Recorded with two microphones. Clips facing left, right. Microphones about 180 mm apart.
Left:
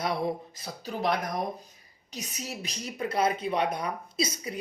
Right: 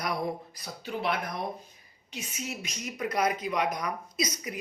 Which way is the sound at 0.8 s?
40° left (ahead or behind).